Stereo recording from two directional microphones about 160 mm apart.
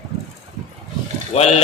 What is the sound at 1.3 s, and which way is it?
Speech, 40° left (ahead or behind).